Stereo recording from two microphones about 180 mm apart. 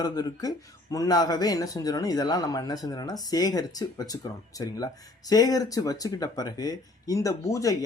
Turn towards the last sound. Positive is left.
turn(degrees=20)  # may be behind; listen again after turning